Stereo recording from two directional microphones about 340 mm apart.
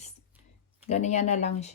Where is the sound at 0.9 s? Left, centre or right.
Left.